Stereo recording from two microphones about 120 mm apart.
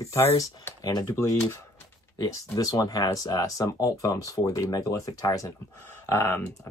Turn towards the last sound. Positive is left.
turn(degrees=20)  # may be behind; listen again after turning